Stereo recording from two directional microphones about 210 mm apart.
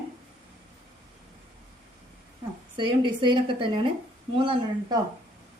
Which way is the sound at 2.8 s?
20° right (ahead or behind).